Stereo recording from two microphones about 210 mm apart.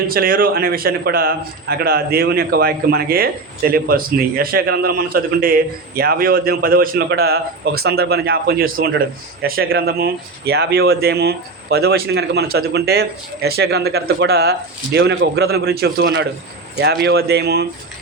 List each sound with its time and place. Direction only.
0.1 s a man's voice: 45° right (ahead or behind)